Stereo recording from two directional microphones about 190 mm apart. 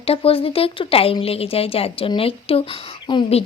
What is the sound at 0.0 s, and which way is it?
A woman's voice, 30° left (ahead or behind).